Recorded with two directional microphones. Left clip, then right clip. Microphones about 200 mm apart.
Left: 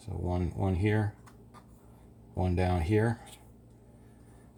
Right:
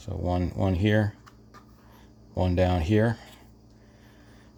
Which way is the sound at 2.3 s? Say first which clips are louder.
Right 6 dB; 35° right (ahead or behind).